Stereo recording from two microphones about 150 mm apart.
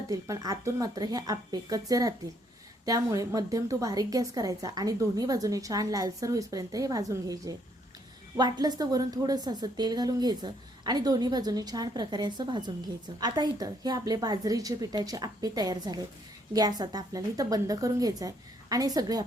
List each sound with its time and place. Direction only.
0.1 s a woman's voice: 25° right (ahead or behind)